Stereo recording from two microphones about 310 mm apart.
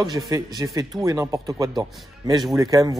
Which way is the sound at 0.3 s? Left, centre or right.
Centre.